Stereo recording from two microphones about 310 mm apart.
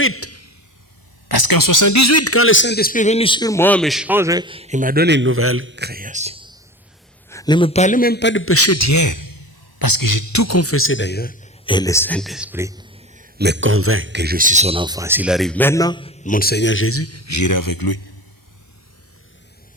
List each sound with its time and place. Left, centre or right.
0.0 s a sound: left
1.5 s speech: left; by 6.6 s centre
7.3 s a man's voice: centre; by 11.5 s left
11.6 s speech: centre; by 17.8 s left